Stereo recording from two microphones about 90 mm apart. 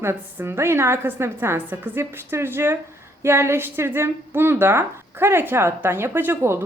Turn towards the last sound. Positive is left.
turn(degrees=-25)  # may be behind; listen again after turning